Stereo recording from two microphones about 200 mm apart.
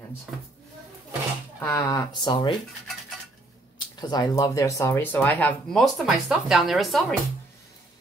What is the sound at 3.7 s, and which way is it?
Speech, 20° left (ahead or behind).